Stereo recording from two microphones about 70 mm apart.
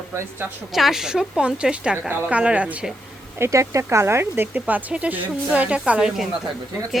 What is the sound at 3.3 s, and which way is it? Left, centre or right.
Speech, right.